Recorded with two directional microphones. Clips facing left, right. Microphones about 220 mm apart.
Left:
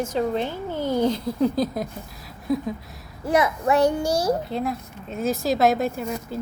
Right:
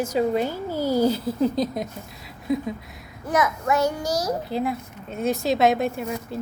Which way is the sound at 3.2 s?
30° left (ahead or behind).